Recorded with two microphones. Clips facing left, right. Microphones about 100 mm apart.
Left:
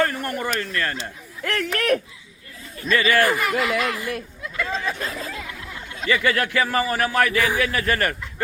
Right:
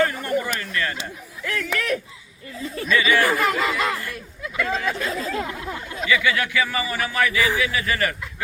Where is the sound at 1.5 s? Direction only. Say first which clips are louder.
Left 3 dB; 60° left (ahead or behind).